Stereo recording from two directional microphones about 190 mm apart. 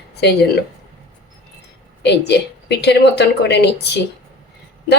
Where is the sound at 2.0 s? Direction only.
60° left (ahead or behind).